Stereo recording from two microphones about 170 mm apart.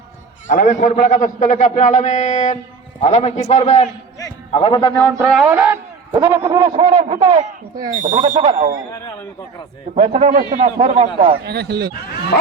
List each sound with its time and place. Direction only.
0.4 s a man's voice: 45° left (ahead or behind); by 4.9 s 30° left (ahead or behind)
5.2 s music: 5° right (ahead or behind)
6.7 s a man's voice: 35° right (ahead or behind)
8.2 s speech: 25° right (ahead or behind)
9.9 s a man's voice: 40° right (ahead or behind)
11.4 s speech: 75° right (ahead or behind)